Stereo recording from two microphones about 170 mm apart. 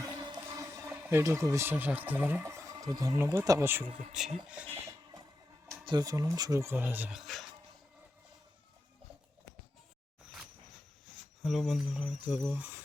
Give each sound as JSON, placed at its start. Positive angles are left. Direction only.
{"t": 0.0, "sound": "speech", "side_deg": -20}
{"t": 5.8, "sound": "speech", "side_deg": -25}
{"t": 11.0, "sound": "speech", "side_deg": 0}